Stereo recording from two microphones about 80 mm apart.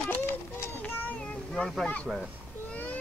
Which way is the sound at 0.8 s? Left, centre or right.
Left.